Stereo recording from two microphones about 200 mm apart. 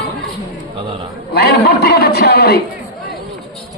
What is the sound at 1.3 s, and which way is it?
A man's voice, 55° left (ahead or behind).